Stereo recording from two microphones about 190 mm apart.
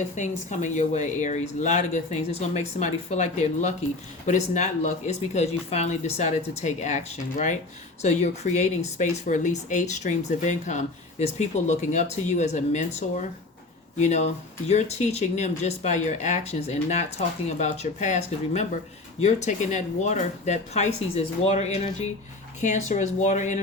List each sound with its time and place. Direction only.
0.2 s speech: 40° left (ahead or behind)